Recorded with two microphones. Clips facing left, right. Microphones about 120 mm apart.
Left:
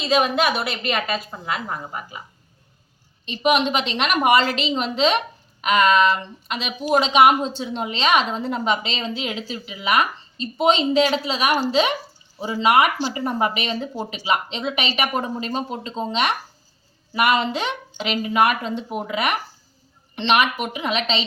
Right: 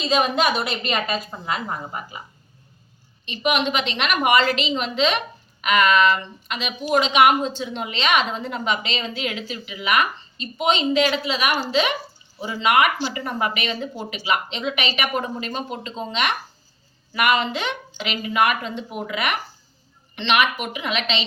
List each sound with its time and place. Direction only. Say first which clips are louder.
0.0 s a woman's voice: left 1 dB; 5° left (ahead or behind)
3.2 s a woman's voice: left 3 dB; 35° left (ahead or behind)